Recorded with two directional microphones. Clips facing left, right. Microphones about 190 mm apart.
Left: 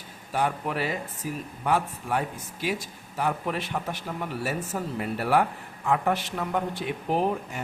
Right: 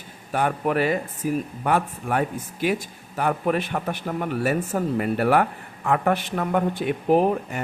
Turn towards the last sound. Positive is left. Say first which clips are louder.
# right 7 dB
turn(degrees=-55)  # may be behind; listen again after turning